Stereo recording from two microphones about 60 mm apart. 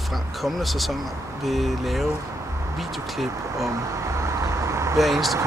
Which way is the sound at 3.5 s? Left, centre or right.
Right.